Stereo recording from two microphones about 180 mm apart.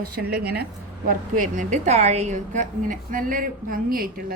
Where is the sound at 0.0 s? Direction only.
60° right (ahead or behind).